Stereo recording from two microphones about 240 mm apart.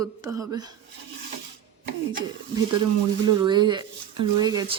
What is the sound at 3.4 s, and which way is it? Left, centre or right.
Speech, centre.